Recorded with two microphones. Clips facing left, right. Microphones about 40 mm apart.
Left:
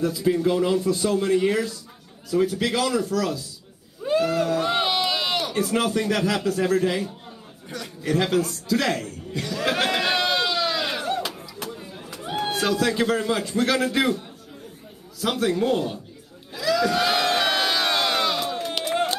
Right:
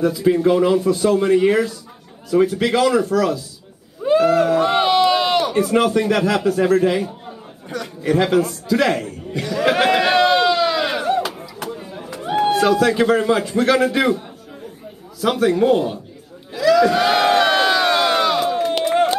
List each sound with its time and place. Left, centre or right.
0.0 s a man's voice: centre
9.9 s a sound: centre
12.4 s a man's voice: centre
16.5 s crowd: centre